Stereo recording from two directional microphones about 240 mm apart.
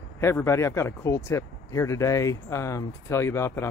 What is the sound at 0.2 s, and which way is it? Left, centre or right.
Speech, centre.